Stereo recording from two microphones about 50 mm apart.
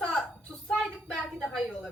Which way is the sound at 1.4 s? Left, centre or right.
Centre.